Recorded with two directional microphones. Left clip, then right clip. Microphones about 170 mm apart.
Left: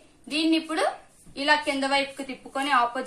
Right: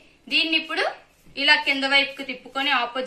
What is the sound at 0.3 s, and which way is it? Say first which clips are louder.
A woman's voice: right 3 dB; 15° left (ahead or behind).